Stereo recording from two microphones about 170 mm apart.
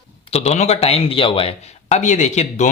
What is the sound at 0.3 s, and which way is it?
Speech, 40° left (ahead or behind).